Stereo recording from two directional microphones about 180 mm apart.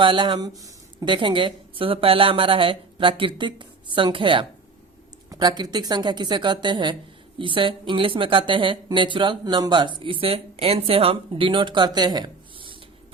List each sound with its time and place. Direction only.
0.0 s speech: 25° right (ahead or behind)